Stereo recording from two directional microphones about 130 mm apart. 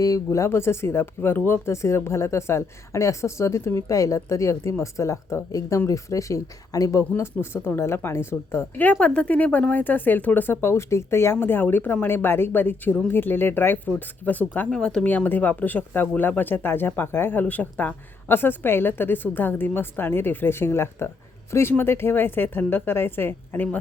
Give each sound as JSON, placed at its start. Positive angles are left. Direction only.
{"t": 0.0, "sound": "speech", "side_deg": 25}